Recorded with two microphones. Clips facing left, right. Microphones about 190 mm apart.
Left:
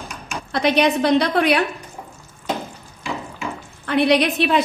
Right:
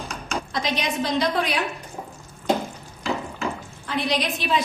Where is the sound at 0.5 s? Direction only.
65° left (ahead or behind).